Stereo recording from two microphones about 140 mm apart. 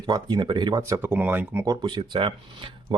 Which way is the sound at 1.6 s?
30° right (ahead or behind).